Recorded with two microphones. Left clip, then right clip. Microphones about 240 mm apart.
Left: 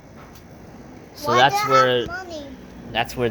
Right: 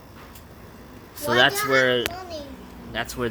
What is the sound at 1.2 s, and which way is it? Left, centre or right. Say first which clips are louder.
Speech: left 3 dB; centre.